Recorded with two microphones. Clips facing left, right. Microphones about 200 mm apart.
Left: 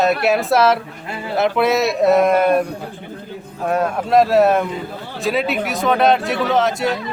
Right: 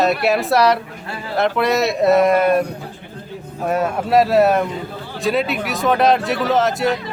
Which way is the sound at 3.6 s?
5° right (ahead or behind).